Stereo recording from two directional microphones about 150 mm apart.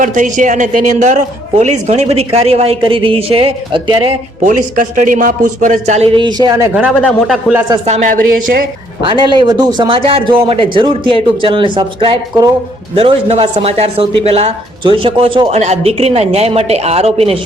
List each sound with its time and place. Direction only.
0.0 s a man's voice: 60° right (ahead or behind); by 3.9 s 35° right (ahead or behind)
4.4 s a man's voice: 60° right (ahead or behind)
6.1 s speech: 30° right (ahead or behind)
7.9 s a man's voice: 50° right (ahead or behind); by 8.6 s 70° right (ahead or behind)
9.0 s speech: 30° right (ahead or behind)
13.0 s speech: 40° right (ahead or behind)